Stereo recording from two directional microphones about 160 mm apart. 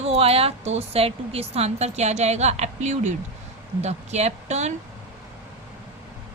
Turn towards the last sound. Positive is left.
turn(degrees=-45)  # may be behind; listen again after turning